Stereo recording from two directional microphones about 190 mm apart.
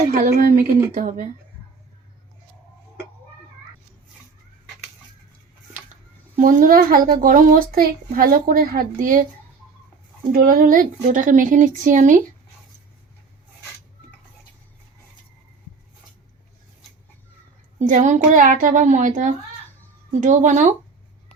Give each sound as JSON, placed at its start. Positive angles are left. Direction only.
{"t": 0.1, "sound": "a child's voice", "side_deg": -50}
{"t": 6.3, "sound": "a child's voice", "side_deg": -45}
{"t": 10.3, "sound": "a child's voice", "side_deg": -50}
{"t": 17.7, "sound": "a woman's voice", "side_deg": -40}